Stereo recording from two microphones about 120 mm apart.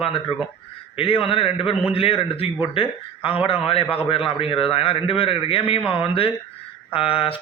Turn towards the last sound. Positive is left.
turn(degrees=50)  # may be behind; listen again after turning